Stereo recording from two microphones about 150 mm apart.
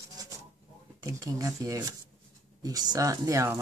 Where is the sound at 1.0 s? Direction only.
25° right (ahead or behind).